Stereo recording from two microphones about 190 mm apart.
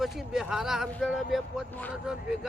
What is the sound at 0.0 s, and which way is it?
Speech, centre (ahead or behind).